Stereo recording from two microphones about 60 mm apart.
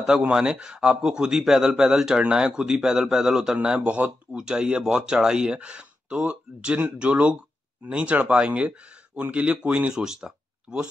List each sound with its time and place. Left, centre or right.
0.3 s speech: centre
9.9 s speech: centre